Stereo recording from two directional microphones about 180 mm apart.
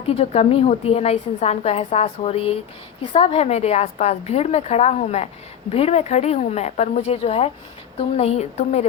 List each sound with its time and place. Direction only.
0.0 s a woman's voice: 35° left (ahead or behind)